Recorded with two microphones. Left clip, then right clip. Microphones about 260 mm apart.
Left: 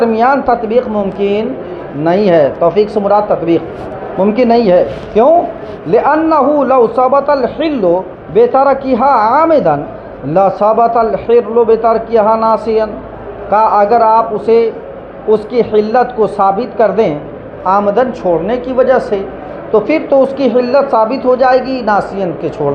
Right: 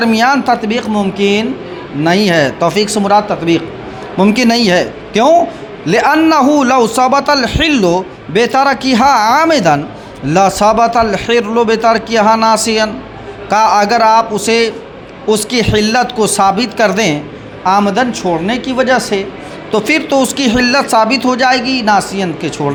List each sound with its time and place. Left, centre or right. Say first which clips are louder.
0.0 s a man's voice: left 1 dB; right